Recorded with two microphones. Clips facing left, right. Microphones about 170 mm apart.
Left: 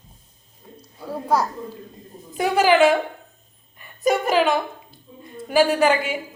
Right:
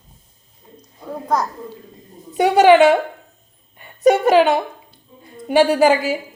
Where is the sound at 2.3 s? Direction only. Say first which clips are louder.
Right 6 dB; 80° right.